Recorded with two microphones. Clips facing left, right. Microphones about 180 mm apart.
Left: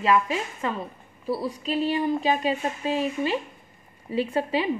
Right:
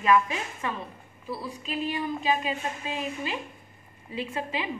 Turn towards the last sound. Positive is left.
turn(degrees=35)  # may be behind; listen again after turning